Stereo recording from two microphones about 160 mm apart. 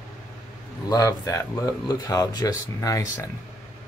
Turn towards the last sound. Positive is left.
turn(degrees=20)  # may be behind; listen again after turning